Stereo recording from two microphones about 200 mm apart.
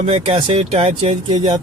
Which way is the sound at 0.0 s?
30° right (ahead or behind).